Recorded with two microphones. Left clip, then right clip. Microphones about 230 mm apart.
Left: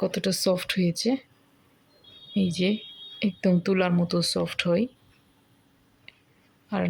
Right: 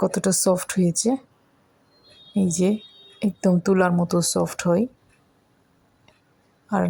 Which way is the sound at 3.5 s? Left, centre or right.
Centre.